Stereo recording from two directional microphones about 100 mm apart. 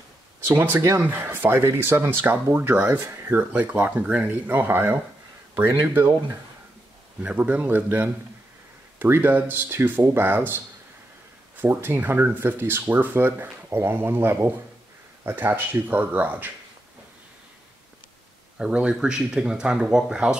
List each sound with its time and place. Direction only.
0.5 s speech: 25° right (ahead or behind)
7.2 s speech: 15° right (ahead or behind)
11.6 s speech: 20° right (ahead or behind)
18.6 s speech: 10° right (ahead or behind)